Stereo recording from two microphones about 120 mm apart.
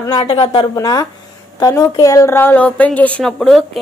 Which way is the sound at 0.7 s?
30° left (ahead or behind).